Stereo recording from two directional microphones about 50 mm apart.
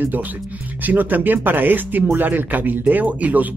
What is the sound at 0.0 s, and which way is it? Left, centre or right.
Speech, right.